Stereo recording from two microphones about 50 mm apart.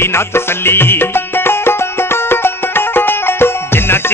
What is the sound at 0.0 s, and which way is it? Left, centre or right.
Music, left.